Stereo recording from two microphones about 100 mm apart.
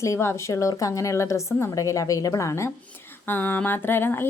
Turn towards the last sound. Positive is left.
turn(degrees=20)  # may be behind; listen again after turning